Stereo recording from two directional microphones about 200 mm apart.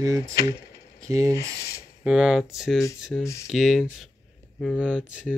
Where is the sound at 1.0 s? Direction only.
15° right (ahead or behind).